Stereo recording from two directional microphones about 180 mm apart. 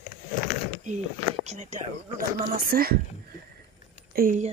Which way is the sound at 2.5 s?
55° right (ahead or behind).